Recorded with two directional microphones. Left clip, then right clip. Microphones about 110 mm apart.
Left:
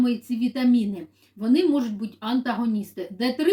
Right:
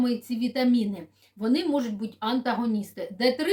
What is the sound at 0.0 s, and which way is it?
Speech, 40° right (ahead or behind).